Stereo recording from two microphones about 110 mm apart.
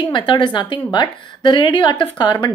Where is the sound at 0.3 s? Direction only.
45° left (ahead or behind).